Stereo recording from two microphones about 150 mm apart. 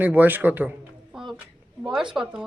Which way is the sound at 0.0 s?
10° right (ahead or behind).